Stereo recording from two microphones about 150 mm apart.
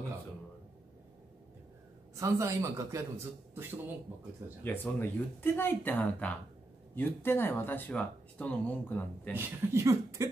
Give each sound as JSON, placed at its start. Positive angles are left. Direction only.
{"t": 2.1, "sound": "a man's voice", "side_deg": -20}
{"t": 4.6, "sound": "speech", "side_deg": 10}
{"t": 9.3, "sound": "a man's voice", "side_deg": -20}